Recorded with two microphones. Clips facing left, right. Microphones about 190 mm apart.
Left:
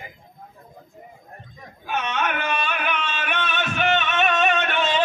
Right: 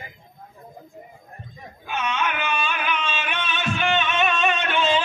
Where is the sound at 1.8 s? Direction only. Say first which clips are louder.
Left 1 dB; 60° left (ahead or behind).